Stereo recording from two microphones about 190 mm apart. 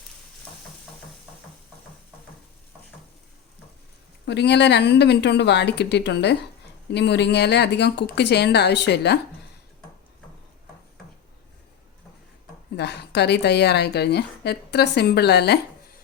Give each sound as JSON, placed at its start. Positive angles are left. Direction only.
{"t": 4.3, "sound": "a woman's voice", "side_deg": 65}
{"t": 12.7, "sound": "a woman's voice", "side_deg": 60}